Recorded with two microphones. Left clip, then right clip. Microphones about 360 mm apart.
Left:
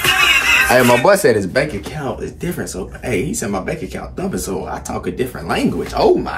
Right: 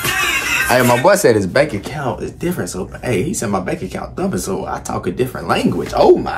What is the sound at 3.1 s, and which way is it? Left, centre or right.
Speech, centre.